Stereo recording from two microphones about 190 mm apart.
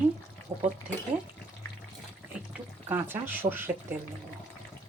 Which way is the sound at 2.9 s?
10° right (ahead or behind).